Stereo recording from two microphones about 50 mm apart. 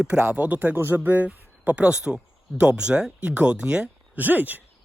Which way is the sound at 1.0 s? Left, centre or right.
Right.